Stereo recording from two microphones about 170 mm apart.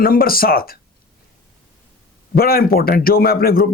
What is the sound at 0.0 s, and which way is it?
Speech, 60° left (ahead or behind).